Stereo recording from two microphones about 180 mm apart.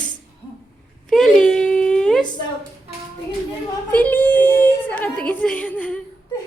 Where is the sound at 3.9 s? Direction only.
10° left (ahead or behind).